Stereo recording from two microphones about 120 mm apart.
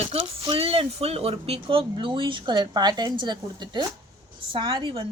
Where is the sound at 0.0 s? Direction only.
50° right (ahead or behind).